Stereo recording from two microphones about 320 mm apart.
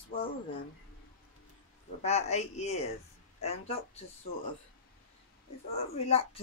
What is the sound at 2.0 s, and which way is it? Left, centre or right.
Speech, left.